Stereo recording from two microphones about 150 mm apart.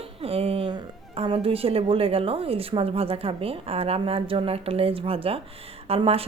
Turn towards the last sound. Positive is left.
turn(degrees=-40)  # may be behind; listen again after turning